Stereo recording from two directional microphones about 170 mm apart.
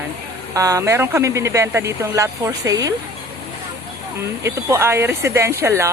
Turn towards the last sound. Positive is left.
turn(degrees=-15)  # may be behind; listen again after turning